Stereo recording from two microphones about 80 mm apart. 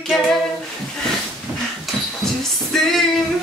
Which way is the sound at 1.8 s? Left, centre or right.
Centre.